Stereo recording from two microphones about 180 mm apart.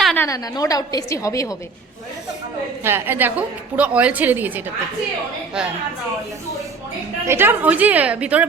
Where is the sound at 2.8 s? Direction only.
15° right (ahead or behind).